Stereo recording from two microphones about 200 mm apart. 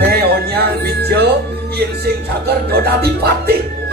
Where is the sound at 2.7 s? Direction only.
50° right (ahead or behind).